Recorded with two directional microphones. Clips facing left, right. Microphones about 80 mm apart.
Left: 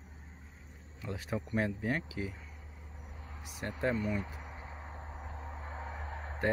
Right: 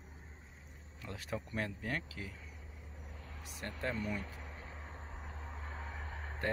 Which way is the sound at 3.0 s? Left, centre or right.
Centre.